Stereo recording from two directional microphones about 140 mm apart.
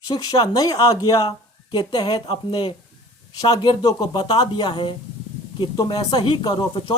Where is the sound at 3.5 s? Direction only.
30° left (ahead or behind).